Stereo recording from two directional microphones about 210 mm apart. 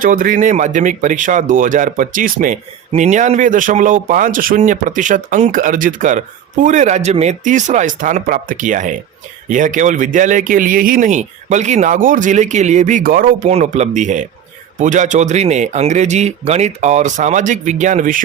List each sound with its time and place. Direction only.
0.0 s speech: 40° right (ahead or behind)